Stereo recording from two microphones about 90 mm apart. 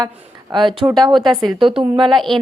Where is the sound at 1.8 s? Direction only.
65° right (ahead or behind).